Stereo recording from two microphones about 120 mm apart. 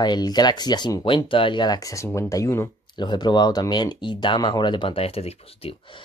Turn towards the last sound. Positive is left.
turn(degrees=50)  # may be behind; listen again after turning